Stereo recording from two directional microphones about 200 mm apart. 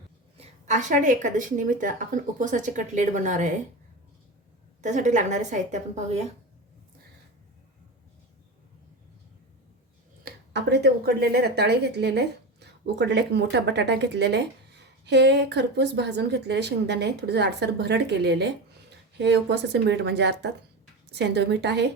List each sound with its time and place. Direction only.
0.3 s speech: 35° right (ahead or behind)
4.8 s speech: 40° right (ahead or behind)
10.5 s speech: 55° right (ahead or behind)